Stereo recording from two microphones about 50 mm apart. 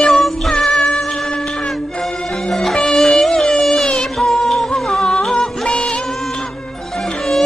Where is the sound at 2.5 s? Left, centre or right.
Centre.